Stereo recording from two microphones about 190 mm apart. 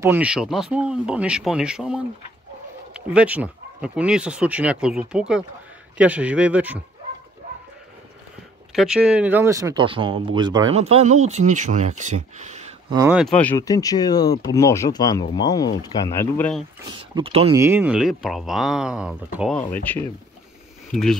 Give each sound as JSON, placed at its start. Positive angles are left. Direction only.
{"t": 0.0, "sound": "speech", "side_deg": -10}
{"t": 8.7, "sound": "speech", "side_deg": -5}
{"t": 10.8, "sound": "speech", "side_deg": -35}
{"t": 13.1, "sound": "speech", "side_deg": 0}
{"t": 17.1, "sound": "speech", "side_deg": -30}
{"t": 17.6, "sound": "speech", "side_deg": -10}
{"t": 19.7, "sound": "speech", "side_deg": 10}